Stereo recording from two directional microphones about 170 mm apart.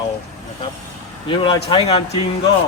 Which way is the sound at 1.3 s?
30° left (ahead or behind).